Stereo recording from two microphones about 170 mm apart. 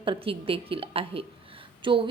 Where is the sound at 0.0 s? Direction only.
30° right (ahead or behind).